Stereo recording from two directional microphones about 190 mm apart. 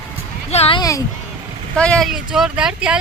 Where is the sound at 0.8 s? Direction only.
20° left (ahead or behind).